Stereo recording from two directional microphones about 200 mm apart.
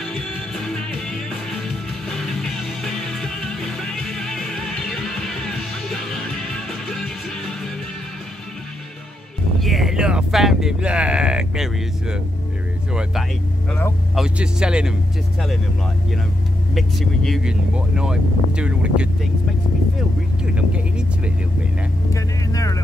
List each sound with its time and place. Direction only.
0.0 s music: centre (ahead or behind)
9.6 s music: centre (ahead or behind)
13.7 s speech: 10° left (ahead or behind)
14.1 s speech: 5° right (ahead or behind)
16.7 s speech: centre (ahead or behind)
20.5 s speech: 5° right (ahead or behind)
22.1 s speech: 15° left (ahead or behind)